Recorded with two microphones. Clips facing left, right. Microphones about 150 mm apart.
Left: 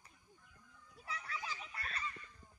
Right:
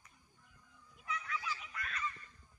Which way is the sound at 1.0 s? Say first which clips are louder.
Right 3 dB; 35° left (ahead or behind).